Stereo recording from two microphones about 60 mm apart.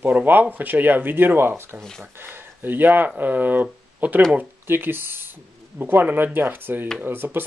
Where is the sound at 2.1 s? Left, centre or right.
Right.